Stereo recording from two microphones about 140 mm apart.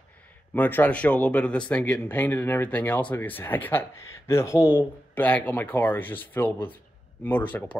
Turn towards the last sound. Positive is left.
turn(degrees=10)  # may be behind; listen again after turning